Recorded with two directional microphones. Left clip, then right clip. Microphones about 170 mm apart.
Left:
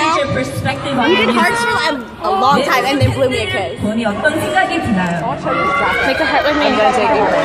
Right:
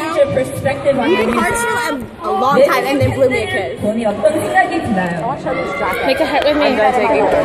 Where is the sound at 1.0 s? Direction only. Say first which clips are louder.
Left 2 dB; 45° right (ahead or behind).